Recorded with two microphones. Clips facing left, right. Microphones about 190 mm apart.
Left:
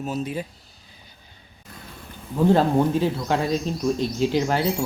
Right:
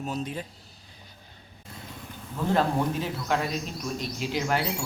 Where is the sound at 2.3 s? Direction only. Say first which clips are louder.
Left 7 dB; 30° left (ahead or behind).